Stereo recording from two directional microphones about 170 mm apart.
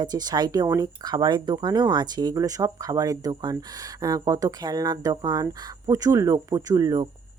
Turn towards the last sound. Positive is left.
turn(degrees=-20)  # may be behind; listen again after turning